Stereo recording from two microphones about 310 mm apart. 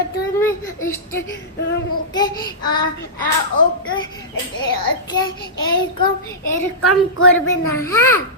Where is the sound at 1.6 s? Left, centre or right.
Left.